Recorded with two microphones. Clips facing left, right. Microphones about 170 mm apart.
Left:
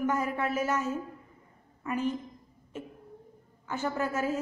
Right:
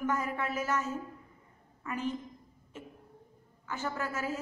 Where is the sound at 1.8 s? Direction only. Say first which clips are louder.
Left 5 dB; 15° left (ahead or behind).